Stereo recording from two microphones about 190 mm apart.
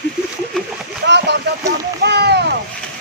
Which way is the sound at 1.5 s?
65° right (ahead or behind).